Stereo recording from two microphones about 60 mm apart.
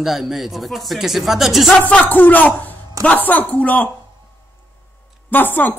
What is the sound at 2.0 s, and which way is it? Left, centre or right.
A man's voice, left.